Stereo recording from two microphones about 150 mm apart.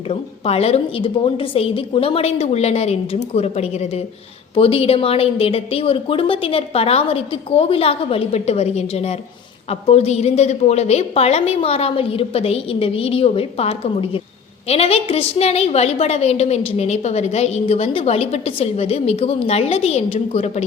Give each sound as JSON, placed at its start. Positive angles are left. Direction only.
{"t": 0.1, "sound": "a woman's voice", "side_deg": 45}